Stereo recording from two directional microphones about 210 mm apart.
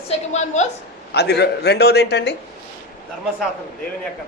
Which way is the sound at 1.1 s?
50° left (ahead or behind).